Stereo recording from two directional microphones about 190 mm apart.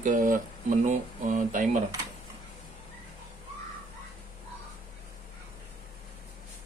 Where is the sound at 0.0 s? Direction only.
45° right (ahead or behind).